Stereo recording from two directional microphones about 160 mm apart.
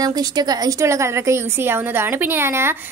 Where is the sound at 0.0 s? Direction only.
25° right (ahead or behind).